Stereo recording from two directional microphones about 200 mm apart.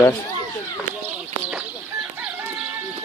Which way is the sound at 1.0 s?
5° right (ahead or behind).